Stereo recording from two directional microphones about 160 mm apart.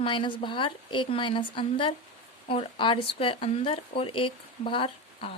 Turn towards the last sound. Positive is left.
turn(degrees=35)  # may be behind; listen again after turning